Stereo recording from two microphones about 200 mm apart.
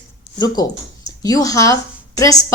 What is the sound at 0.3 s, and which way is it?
Speech, 20° left (ahead or behind).